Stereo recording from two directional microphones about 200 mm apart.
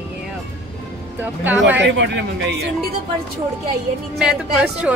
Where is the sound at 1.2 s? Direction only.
10° right (ahead or behind).